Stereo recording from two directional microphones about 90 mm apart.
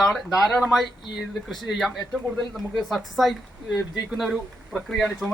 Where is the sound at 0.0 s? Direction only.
Centre (ahead or behind).